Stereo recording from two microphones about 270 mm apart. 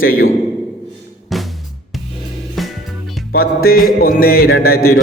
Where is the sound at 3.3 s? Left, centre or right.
Left.